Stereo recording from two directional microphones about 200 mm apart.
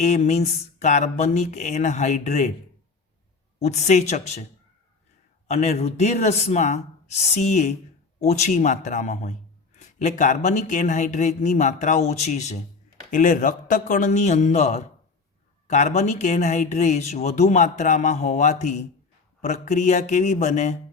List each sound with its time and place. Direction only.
0.0 s speech: 35° left (ahead or behind)
3.6 s speech: 35° left (ahead or behind)
5.5 s speech: 35° left (ahead or behind)